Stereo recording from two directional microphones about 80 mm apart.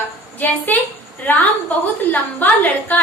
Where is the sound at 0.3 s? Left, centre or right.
Left.